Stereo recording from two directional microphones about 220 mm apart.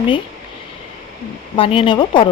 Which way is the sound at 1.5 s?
25° left (ahead or behind).